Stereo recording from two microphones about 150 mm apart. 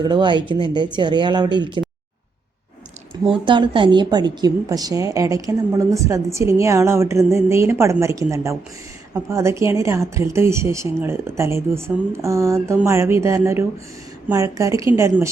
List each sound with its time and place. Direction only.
0.0 s speech: 30° right (ahead or behind)
3.2 s a woman's voice: 35° right (ahead or behind)